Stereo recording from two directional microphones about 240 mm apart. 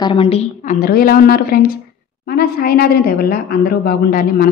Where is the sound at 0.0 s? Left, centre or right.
Left.